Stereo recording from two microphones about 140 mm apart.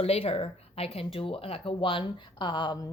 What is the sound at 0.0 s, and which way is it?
A woman's voice, 45° left (ahead or behind).